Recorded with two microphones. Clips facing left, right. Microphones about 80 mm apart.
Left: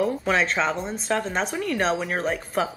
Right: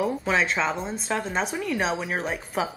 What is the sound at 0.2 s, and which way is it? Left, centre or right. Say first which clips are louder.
Speech: left 1 dB; centre.